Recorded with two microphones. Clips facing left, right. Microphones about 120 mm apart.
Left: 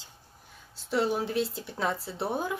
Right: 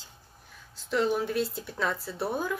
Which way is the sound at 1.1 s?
25° left (ahead or behind).